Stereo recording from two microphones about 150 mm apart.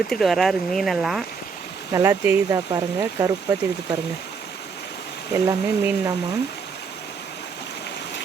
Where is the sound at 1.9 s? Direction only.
15° right (ahead or behind).